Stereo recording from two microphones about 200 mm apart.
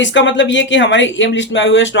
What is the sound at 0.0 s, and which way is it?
Speech, 65° left (ahead or behind).